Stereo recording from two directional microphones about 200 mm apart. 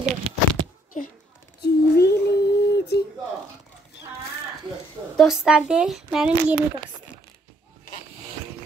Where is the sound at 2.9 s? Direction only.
55° left (ahead or behind).